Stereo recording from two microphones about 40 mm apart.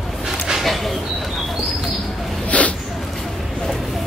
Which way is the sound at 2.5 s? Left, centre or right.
Left.